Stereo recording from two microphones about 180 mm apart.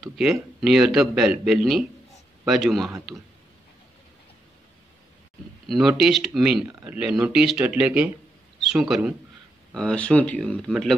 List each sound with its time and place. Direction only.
0.0 s speech: centre (ahead or behind)
5.7 s speech: centre (ahead or behind)